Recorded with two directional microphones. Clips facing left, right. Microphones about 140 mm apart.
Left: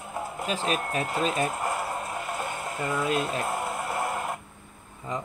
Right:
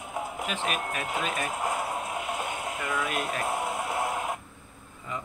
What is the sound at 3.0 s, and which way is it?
Speech, 25° left (ahead or behind).